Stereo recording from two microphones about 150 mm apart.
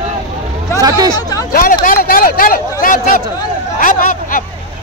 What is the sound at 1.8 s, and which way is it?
Speech, 75° left (ahead or behind).